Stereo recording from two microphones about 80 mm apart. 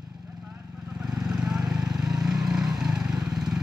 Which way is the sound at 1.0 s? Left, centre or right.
Centre.